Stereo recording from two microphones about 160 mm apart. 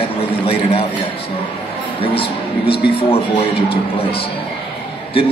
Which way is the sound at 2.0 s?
35° left (ahead or behind).